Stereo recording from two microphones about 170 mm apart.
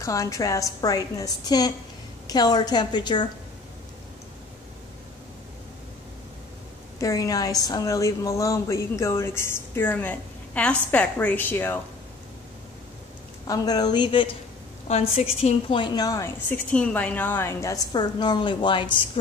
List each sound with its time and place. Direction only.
0.0 s a woman's voice: 20° left (ahead or behind)
7.0 s a woman's voice: 20° left (ahead or behind)
13.5 s a woman's voice: 25° left (ahead or behind)
16.7 s a woman's voice: 10° left (ahead or behind); by 19.0 s 30° left (ahead or behind)